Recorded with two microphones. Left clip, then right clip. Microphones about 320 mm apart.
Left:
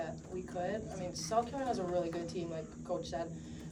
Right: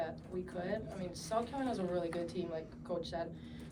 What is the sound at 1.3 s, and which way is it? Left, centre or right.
Speech, centre.